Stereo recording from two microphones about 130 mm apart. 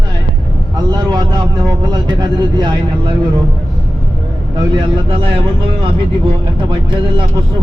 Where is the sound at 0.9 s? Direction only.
30° right (ahead or behind).